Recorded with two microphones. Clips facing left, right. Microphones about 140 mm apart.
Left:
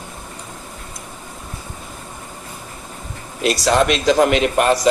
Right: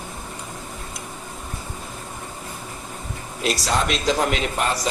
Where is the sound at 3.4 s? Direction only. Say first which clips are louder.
Left 7 dB; 70° left (ahead or behind).